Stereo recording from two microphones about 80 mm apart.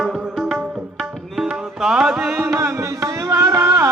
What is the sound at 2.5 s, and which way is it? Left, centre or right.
Music, right.